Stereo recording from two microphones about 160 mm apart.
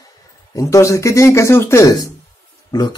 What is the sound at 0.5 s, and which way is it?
A man's voice, 20° left (ahead or behind).